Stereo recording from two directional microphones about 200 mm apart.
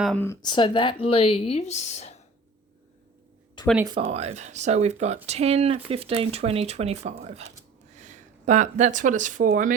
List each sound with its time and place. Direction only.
0.0 s speech: 5° left (ahead or behind)
0.4 s a woman's voice: 25° left (ahead or behind)
3.6 s a sound: 20° left (ahead or behind)
4.1 s speech: 30° right (ahead or behind)